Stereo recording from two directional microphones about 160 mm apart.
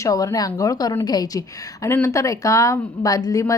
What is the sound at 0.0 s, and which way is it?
A woman's voice, 20° left (ahead or behind).